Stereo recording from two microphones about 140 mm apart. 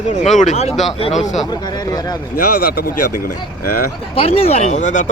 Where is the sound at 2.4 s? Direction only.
90° left.